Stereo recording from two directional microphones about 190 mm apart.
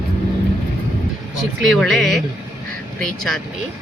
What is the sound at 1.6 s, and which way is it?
Speech, centre (ahead or behind).